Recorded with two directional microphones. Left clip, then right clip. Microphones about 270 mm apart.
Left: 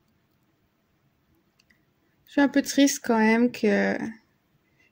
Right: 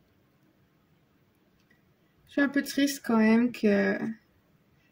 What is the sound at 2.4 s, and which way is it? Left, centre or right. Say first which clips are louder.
Speech: left 5 dB; left.